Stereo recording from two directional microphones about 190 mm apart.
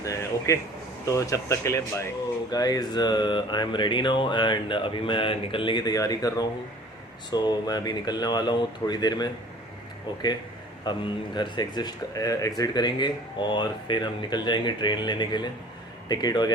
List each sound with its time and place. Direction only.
0.0 s a man's voice: 15° left (ahead or behind)
10.9 s speech: 25° left (ahead or behind)